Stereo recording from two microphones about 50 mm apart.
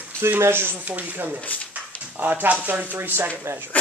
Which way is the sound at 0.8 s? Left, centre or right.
Right.